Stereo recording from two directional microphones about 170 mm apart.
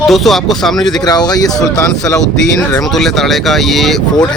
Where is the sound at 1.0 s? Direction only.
25° left (ahead or behind).